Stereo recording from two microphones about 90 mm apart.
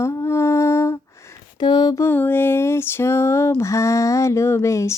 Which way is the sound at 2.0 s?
25° left (ahead or behind).